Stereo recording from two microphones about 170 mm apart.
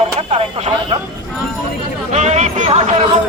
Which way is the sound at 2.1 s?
40° right (ahead or behind).